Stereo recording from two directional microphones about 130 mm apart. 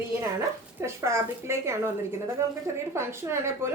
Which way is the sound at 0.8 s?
20° right (ahead or behind).